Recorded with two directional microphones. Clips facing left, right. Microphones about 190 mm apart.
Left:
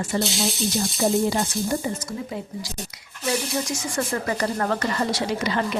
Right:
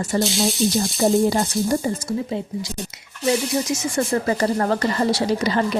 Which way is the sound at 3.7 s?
30° right (ahead or behind).